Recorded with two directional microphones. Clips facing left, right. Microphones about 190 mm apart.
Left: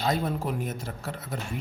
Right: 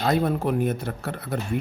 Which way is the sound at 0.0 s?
60° right (ahead or behind).